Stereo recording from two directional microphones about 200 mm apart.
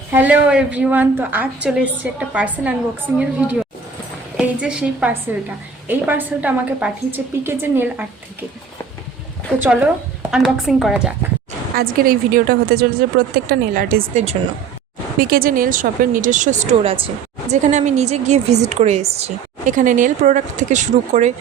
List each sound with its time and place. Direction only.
0.1 s a woman's voice: 10° right (ahead or behind)
9.6 s a woman's voice: 10° right (ahead or behind)
11.8 s a woman's voice: 45° right (ahead or behind)